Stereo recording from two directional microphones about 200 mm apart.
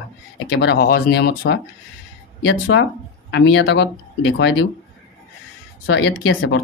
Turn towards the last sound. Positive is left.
turn(degrees=65)  # may be behind; listen again after turning